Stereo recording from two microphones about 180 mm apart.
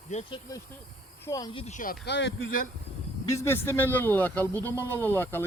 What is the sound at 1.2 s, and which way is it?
Speech, 20° left (ahead or behind).